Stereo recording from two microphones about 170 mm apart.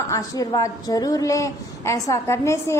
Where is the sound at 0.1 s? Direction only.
20° left (ahead or behind).